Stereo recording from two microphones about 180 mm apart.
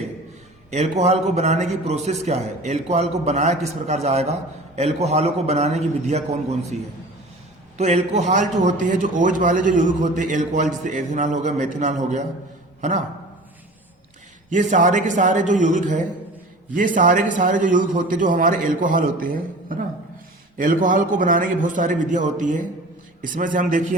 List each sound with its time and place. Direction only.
0.7 s a man's voice: 40° right (ahead or behind)
7.8 s a man's voice: 40° right (ahead or behind)
14.5 s a man's voice: 45° right (ahead or behind)